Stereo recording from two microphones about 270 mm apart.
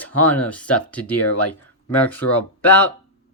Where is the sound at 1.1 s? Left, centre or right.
Left.